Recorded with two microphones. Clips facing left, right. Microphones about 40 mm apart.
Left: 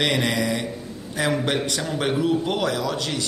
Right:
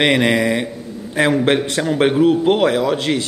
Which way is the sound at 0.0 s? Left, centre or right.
Right.